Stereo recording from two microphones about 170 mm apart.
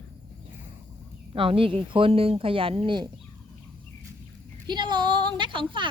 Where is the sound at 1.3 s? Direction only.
30° right (ahead or behind).